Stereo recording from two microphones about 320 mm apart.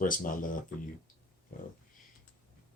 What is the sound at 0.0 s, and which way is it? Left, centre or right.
Speech, left.